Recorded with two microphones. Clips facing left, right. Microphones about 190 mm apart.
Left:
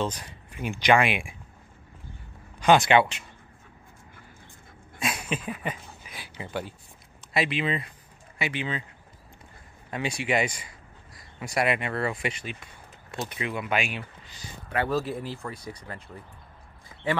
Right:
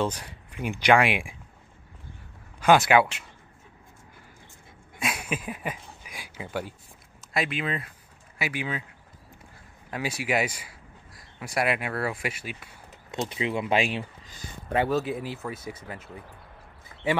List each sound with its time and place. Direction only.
0.0 s speech: 10° right (ahead or behind)
2.6 s speech: 5° right (ahead or behind)
4.9 s a sound: 5° right (ahead or behind)
7.3 s speech: centre (ahead or behind)
9.8 s speech: 5° right (ahead or behind)
13.1 s speech: 25° right (ahead or behind)
14.4 s a sound: 55° right (ahead or behind)
14.9 s speech: centre (ahead or behind)
15.5 s speech: 25° right (ahead or behind)